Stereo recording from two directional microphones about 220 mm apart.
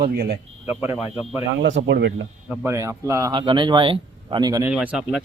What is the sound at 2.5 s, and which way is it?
Speech, 10° right (ahead or behind).